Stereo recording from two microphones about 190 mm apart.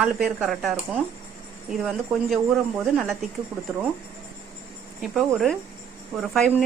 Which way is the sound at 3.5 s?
10° right (ahead or behind).